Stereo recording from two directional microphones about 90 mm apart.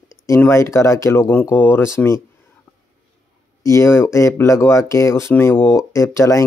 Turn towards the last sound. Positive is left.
turn(degrees=35)  # may be behind; listen again after turning